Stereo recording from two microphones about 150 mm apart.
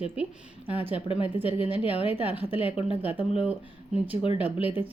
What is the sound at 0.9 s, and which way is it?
Speech, 40° left (ahead or behind).